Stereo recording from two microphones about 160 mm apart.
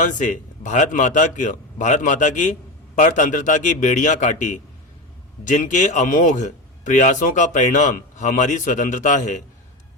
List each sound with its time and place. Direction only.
0.0 s a man's voice: 50° left (ahead or behind)